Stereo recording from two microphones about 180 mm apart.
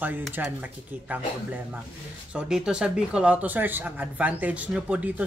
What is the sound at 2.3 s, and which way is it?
A woman's voice, 5° right (ahead or behind).